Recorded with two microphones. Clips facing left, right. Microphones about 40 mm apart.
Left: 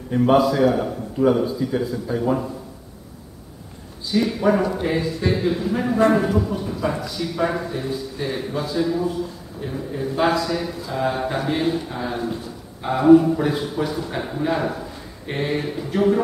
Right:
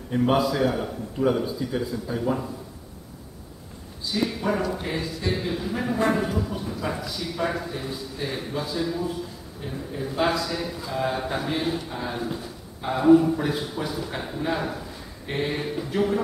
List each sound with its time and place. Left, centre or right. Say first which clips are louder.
0.1 s a man's voice: left 5 dB; centre
4.1 s a man's voice: left 6 dB; centre